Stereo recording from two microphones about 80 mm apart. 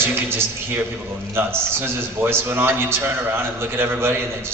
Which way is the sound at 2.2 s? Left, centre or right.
Right.